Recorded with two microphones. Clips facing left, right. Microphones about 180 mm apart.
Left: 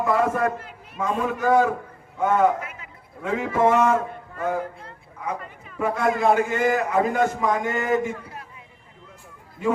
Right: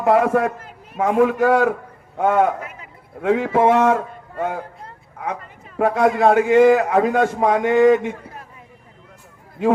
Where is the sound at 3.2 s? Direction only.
85° right.